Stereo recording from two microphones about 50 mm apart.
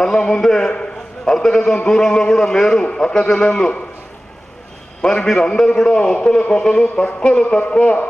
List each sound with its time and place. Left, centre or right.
0.0 s a man's voice: centre
5.0 s a man's voice: centre